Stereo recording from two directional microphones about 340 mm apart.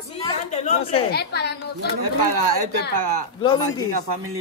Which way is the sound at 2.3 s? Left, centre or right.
Right.